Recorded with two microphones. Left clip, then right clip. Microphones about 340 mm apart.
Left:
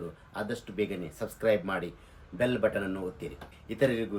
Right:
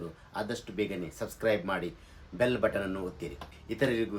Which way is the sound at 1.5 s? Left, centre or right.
Centre.